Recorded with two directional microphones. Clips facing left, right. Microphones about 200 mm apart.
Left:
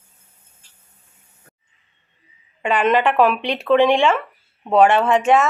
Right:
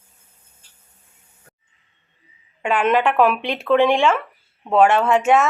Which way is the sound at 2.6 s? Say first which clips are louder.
Left 1 dB; 5° right (ahead or behind).